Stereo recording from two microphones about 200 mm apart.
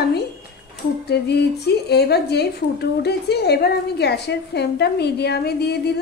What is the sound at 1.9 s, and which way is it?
A woman's voice, 55° left (ahead or behind).